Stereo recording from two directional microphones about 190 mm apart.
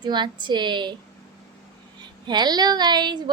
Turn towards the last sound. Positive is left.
turn(degrees=-25)  # may be behind; listen again after turning